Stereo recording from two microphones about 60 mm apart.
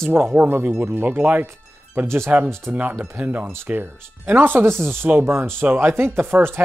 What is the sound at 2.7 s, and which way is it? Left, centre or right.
Speech, right.